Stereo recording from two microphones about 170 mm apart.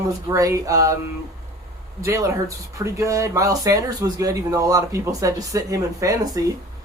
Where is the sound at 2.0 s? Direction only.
20° right (ahead or behind).